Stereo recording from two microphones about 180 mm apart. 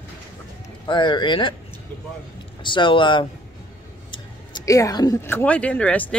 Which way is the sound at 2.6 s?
25° left (ahead or behind).